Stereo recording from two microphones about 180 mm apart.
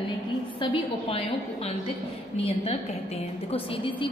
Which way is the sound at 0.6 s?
30° left (ahead or behind).